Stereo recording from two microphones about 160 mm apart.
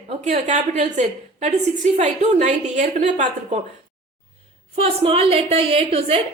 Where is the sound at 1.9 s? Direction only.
45° right (ahead or behind).